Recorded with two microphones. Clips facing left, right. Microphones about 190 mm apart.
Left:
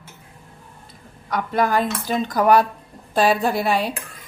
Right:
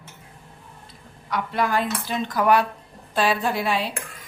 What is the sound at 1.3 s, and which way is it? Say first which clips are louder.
A woman's voice: left 3 dB; 45° left (ahead or behind).